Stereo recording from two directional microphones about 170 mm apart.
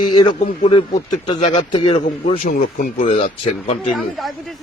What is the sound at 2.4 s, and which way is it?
Speech, 55° left (ahead or behind).